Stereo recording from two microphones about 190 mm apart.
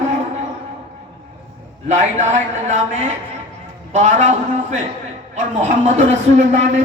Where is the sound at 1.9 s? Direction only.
40° right (ahead or behind).